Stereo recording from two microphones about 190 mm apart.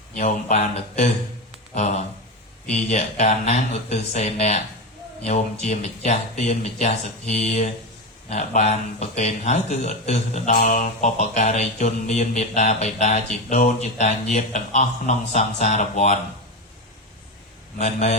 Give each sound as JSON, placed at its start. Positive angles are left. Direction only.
{"t": 0.2, "sound": "speech", "side_deg": 35}
{"t": 17.7, "sound": "speech", "side_deg": 40}